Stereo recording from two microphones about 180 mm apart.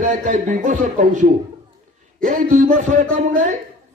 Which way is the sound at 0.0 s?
45° right (ahead or behind).